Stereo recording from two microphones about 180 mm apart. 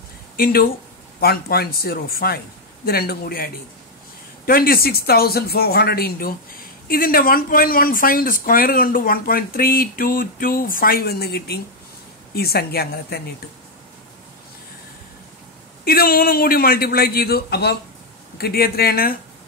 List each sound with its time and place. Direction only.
0.4 s a man's voice: 55° left (ahead or behind)
15.8 s a man's voice: 55° left (ahead or behind)